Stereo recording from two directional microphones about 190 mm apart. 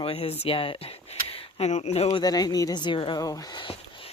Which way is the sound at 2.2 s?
20° left (ahead or behind).